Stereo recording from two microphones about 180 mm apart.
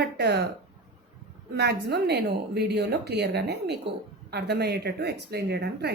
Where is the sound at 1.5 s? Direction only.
65° right (ahead or behind).